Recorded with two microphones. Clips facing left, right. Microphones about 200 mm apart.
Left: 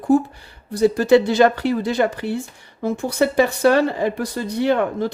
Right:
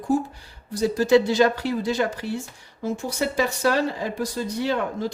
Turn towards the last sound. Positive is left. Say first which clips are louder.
# left 6 dB
turn(degrees=60)  # may be behind; listen again after turning